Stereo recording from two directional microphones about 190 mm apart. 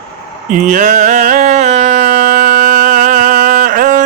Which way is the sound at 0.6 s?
45° right (ahead or behind).